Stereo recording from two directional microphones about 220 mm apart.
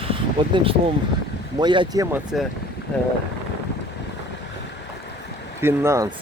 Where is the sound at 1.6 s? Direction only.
20° right (ahead or behind).